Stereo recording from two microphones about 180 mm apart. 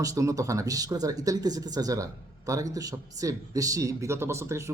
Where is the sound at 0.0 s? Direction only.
20° right (ahead or behind).